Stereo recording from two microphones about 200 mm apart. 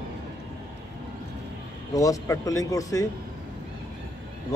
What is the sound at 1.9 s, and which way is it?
A man's voice, 15° left (ahead or behind).